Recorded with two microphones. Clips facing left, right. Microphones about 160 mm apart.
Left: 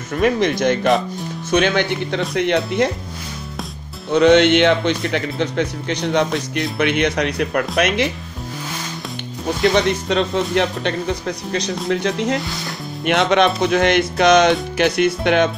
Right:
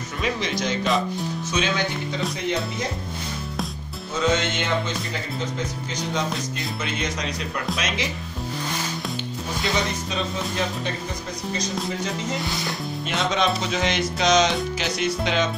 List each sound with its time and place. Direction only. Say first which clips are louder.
0.2 s speech: left 9 dB; 55° left (ahead or behind)
4.1 s speech: left 12 dB; 70° left (ahead or behind)
10.0 s speech: left 9 dB; 70° left (ahead or behind)
12.4 s speech: left 2 dB; centre (ahead or behind)
13.0 s speech: left 9 dB; 65° left (ahead or behind)